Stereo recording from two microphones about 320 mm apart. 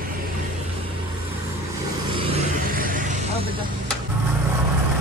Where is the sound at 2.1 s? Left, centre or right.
Right.